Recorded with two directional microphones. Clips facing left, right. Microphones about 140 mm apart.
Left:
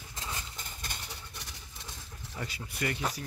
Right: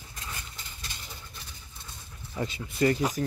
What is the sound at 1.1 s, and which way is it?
Vehicle, 75° left (ahead or behind).